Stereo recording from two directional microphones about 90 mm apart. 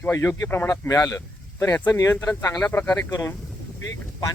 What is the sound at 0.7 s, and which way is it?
Speech, 45° left (ahead or behind).